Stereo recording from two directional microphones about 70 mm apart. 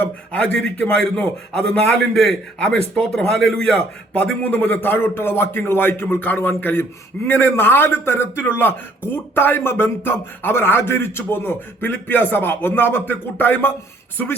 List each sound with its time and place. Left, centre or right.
0.3 s a man's voice: centre